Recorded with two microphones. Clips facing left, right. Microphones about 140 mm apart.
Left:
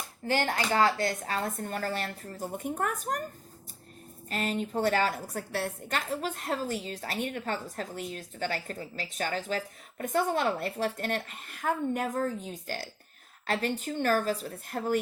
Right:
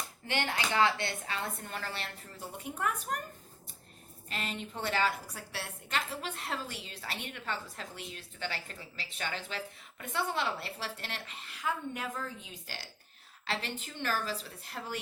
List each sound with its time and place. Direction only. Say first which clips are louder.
0.3 s speech: left 6 dB; 40° left (ahead or behind)
4.3 s a woman's voice: left 8 dB; 45° left (ahead or behind)